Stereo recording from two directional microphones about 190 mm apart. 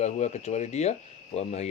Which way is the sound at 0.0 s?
35° left (ahead or behind).